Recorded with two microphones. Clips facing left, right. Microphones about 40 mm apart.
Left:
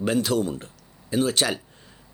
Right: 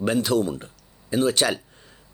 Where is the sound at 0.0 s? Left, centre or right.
Right.